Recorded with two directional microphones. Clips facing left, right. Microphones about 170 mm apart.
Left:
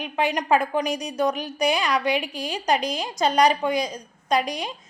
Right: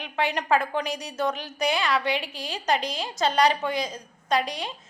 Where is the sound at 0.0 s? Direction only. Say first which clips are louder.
Left 3 dB; 15° left (ahead or behind).